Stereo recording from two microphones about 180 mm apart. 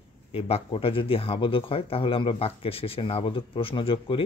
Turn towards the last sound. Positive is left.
turn(degrees=30)  # may be behind; listen again after turning